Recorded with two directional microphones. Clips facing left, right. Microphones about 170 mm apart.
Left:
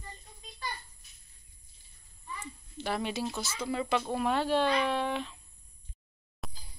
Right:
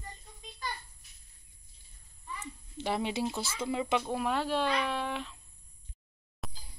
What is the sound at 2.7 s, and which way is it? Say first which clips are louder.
Speech: right 1 dB; 20° right (ahead or behind).